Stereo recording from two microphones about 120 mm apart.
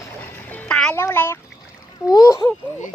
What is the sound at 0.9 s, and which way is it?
Speech, 20° left (ahead or behind).